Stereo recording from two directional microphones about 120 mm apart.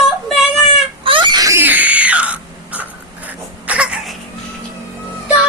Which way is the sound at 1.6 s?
15° right (ahead or behind).